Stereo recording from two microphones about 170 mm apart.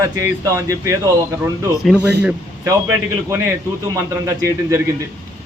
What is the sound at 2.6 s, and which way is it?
A man's voice, 15° right (ahead or behind).